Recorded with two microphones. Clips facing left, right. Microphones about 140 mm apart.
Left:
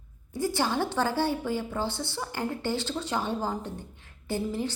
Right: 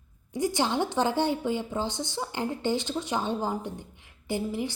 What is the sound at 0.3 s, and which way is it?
A woman's voice, 15° right (ahead or behind).